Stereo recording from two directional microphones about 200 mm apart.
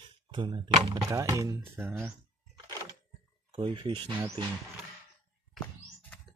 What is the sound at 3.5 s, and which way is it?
Speech, 25° right (ahead or behind).